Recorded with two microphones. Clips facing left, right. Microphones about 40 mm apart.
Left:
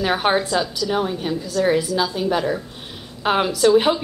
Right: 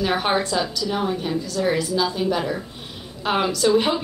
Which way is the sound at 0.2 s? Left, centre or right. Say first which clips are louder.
Left 2 dB; centre.